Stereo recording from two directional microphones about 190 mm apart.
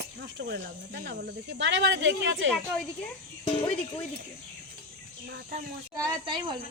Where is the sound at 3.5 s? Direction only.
30° left (ahead or behind).